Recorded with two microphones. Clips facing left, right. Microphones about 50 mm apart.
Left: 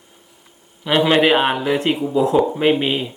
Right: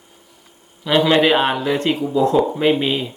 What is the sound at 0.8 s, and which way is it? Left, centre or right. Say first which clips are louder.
Speech: even; centre.